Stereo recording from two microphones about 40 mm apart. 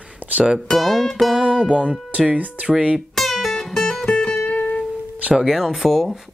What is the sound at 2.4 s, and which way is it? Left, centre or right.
Speech, right.